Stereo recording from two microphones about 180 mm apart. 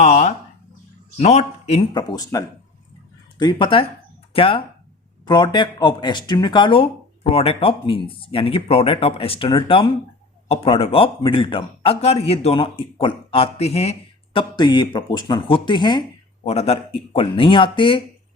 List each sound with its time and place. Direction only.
0.0 s a sound: 40° left (ahead or behind)
1.2 s a man's voice: 40° left (ahead or behind)
1.9 s a man's voice: 20° left (ahead or behind)
14.3 s speech: 25° left (ahead or behind)